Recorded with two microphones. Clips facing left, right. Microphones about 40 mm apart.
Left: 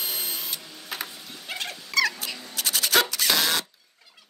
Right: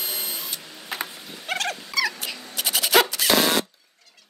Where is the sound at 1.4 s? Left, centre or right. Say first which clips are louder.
Right 7 dB; right.